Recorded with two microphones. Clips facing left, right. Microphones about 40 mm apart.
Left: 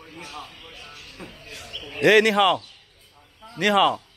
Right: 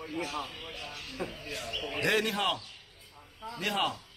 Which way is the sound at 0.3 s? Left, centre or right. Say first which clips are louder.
Right 1 dB; centre.